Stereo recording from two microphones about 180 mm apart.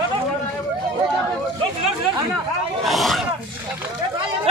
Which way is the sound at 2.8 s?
Centre (ahead or behind).